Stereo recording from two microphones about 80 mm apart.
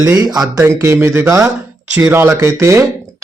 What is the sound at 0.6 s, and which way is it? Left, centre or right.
Speech, right.